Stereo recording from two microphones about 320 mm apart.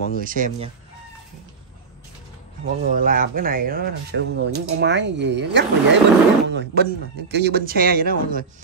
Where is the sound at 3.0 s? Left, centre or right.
Right.